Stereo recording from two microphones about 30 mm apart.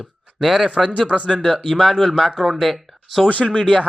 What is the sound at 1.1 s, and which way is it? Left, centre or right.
Speech, right.